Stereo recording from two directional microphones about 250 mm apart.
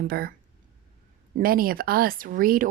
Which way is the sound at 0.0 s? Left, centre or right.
Right.